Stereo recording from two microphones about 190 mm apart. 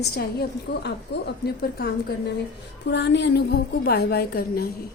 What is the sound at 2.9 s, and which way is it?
A woman's voice, 65° left (ahead or behind).